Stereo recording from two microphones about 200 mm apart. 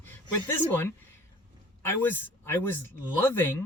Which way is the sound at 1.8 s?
10° left (ahead or behind).